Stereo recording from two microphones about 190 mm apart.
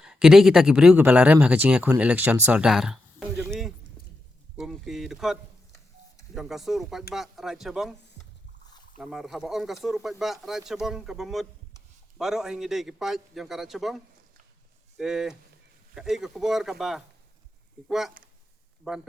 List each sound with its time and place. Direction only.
0.0 s speech: 5° right (ahead or behind)
9.0 s speech: centre (ahead or behind)